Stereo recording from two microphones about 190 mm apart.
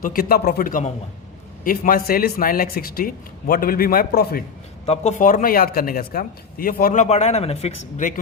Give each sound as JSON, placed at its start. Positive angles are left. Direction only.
{"t": 0.0, "sound": "speech", "side_deg": 50}
{"t": 4.9, "sound": "speech", "side_deg": 40}